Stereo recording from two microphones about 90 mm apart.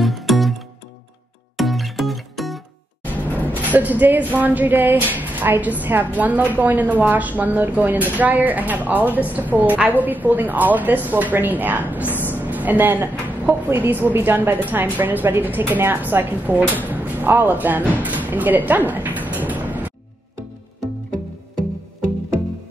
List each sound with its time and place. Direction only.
0.0 s music: centre (ahead or behind)
3.3 s a woman's voice: 20° right (ahead or behind)
11.9 s a sound: 20° right (ahead or behind)
12.3 s a woman's voice: 20° right (ahead or behind)